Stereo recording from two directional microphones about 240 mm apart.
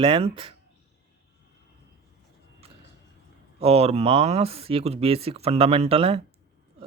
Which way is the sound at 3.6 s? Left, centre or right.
Right.